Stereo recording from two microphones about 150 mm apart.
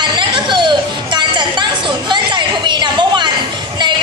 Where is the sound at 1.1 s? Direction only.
30° right (ahead or behind).